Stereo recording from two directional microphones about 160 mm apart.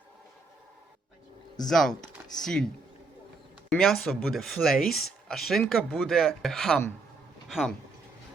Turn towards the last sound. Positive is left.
turn(degrees=0)  # may be behind; listen again after turning